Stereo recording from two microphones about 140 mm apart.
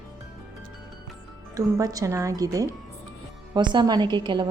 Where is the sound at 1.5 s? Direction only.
25° right (ahead or behind).